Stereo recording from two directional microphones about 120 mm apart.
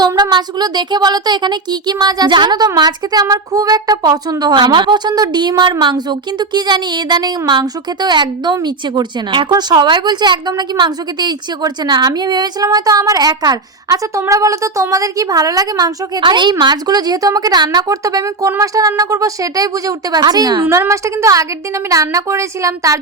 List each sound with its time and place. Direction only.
0.0 s speech: 35° right (ahead or behind)
20.7 s speech: 25° right (ahead or behind)